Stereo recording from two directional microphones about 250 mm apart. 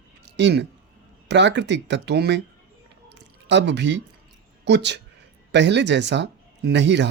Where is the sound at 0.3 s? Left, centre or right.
Right.